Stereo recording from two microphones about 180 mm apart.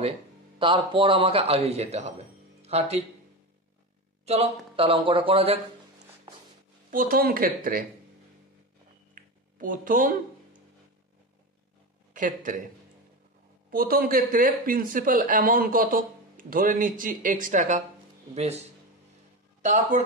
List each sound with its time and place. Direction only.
0.6 s a man's voice: 30° right (ahead or behind)
4.3 s a man's voice: 35° right (ahead or behind)
6.9 s speech: 50° right (ahead or behind)
9.1 s a sound: 50° right (ahead or behind)
12.1 s speech: 45° right (ahead or behind)
13.7 s a man's voice: 55° right (ahead or behind); by 18.6 s 35° right (ahead or behind)